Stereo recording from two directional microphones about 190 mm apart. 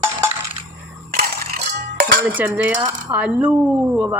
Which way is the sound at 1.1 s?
50° right (ahead or behind).